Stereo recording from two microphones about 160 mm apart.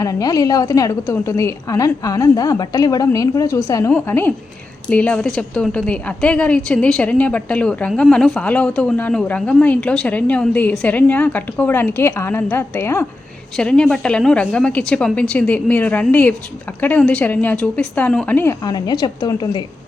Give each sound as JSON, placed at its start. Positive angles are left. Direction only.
{"t": 0.0, "sound": "a woman's voice", "side_deg": 20}
{"t": 13.6, "sound": "a woman's voice", "side_deg": 5}
{"t": 18.6, "sound": "a woman's voice", "side_deg": 25}